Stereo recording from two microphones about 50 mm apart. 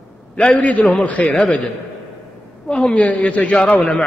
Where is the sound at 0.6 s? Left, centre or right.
Left.